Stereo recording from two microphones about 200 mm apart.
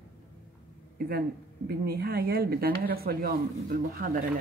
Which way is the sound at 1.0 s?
50° right (ahead or behind).